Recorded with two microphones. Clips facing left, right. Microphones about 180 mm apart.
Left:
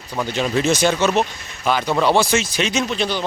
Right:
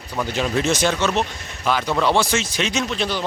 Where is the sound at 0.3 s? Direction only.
Centre (ahead or behind).